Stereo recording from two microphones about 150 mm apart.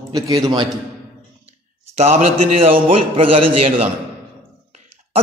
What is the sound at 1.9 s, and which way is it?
A man's voice, 45° right (ahead or behind).